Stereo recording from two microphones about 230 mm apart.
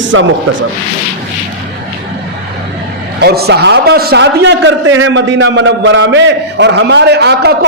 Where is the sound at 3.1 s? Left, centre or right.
Right.